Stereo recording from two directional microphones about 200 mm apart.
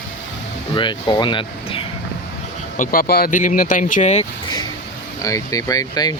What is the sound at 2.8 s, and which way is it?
Speech, 45° left (ahead or behind).